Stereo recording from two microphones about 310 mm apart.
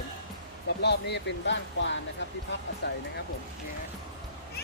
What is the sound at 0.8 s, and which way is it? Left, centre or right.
Speech, left.